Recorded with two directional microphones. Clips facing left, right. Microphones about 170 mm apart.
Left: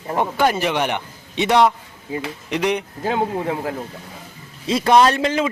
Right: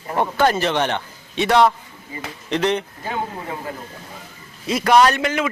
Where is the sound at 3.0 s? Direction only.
85° left.